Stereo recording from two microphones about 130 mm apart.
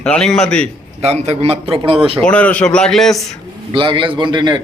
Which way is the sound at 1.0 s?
55° right (ahead or behind).